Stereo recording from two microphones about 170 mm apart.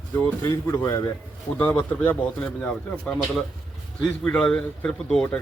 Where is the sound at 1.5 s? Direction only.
10° left (ahead or behind).